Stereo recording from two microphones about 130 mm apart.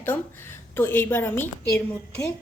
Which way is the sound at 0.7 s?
15° left (ahead or behind).